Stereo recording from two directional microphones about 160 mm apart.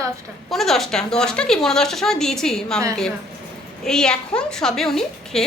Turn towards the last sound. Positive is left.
turn(degrees=5)  # may be behind; listen again after turning